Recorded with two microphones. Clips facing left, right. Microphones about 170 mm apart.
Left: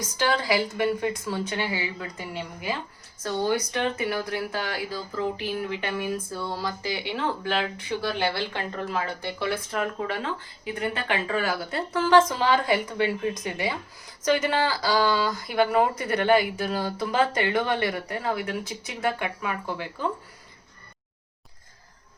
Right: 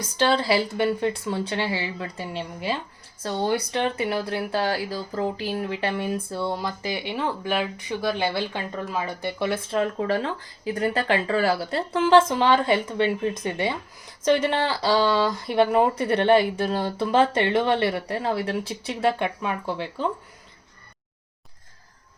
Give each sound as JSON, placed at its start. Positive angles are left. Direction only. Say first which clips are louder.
{"t": 0.2, "sound": "speech", "louder": "right 3 dB", "side_deg": -30}